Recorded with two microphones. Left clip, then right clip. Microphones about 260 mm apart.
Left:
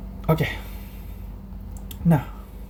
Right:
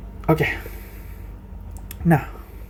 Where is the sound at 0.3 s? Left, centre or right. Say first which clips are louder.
Right 4 dB; right.